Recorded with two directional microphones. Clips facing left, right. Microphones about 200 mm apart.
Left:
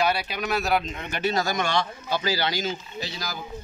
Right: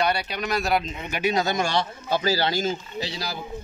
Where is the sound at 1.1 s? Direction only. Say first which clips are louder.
Right 2 dB; 15° right (ahead or behind); by 2.5 s 35° right (ahead or behind).